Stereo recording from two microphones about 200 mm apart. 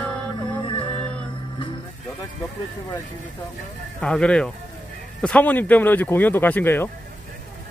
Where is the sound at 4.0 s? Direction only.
5° left (ahead or behind).